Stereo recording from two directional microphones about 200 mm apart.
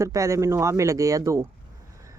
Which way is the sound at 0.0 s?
15° right (ahead or behind).